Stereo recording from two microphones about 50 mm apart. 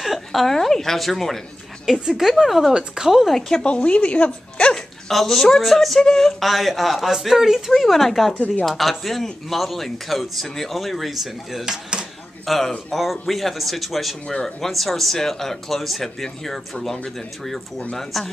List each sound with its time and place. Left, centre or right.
0.0 s speech: centre
1.9 s speech: centre
3.3 s speech: centre
3.6 s a woman's voice: left
4.7 s speech: centre
12.4 s speech: centre